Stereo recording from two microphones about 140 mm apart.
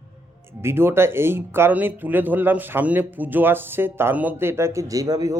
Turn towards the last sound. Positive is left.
turn(degrees=-25)  # may be behind; listen again after turning